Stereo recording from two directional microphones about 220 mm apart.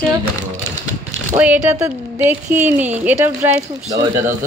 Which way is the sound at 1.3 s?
5° right (ahead or behind).